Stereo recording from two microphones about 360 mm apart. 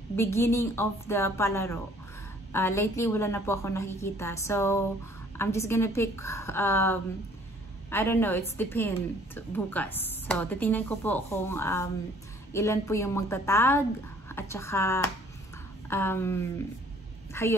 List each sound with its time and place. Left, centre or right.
0.1 s a woman's voice: centre